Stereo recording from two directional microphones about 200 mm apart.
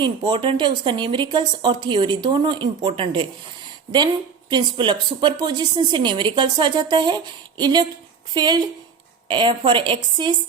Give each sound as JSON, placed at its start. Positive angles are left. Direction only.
{"t": 0.0, "sound": "speech", "side_deg": -25}